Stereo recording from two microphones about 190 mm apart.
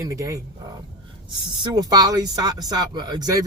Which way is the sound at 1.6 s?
20° right (ahead or behind).